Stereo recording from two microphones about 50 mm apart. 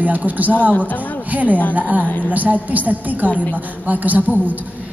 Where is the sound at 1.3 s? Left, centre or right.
Right.